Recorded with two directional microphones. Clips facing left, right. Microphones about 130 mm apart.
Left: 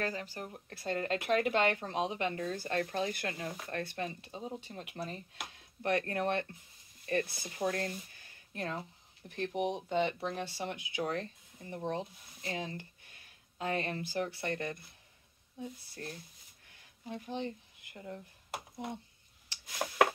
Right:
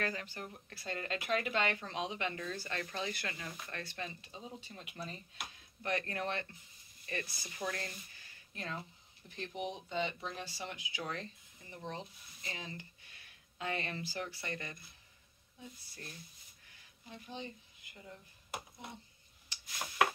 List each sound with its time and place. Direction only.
0.0 s speech: 30° left (ahead or behind)
3.7 s speech: 50° left (ahead or behind)
7.4 s speech: 35° left (ahead or behind)
9.3 s speech: 60° left (ahead or behind)
17.1 s speech: 60° left (ahead or behind)
17.9 s speech: 50° left (ahead or behind)
19.5 s a sound: 55° left (ahead or behind)